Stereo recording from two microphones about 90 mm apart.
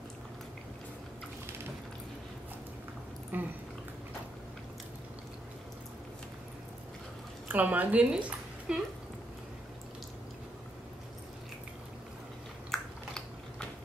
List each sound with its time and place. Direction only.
3.3 s dog: 20° right (ahead or behind)
7.4 s speech: 20° right (ahead or behind)
12.7 s chewing: 5° left (ahead or behind)